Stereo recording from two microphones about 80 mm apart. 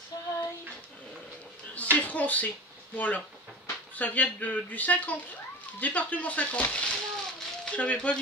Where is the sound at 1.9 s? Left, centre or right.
Centre.